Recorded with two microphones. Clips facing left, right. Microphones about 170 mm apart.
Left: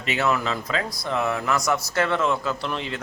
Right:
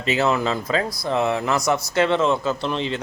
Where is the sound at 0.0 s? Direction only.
30° right (ahead or behind).